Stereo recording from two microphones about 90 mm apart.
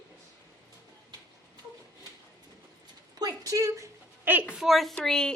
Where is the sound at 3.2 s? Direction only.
40° right (ahead or behind).